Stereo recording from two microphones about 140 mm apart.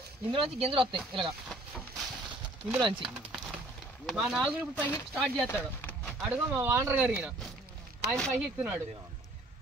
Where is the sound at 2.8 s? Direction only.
35° right (ahead or behind).